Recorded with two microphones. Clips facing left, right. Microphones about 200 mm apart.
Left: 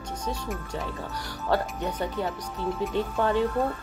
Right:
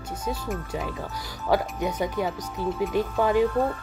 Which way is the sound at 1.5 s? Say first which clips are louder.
Right 3 dB; 10° right (ahead or behind).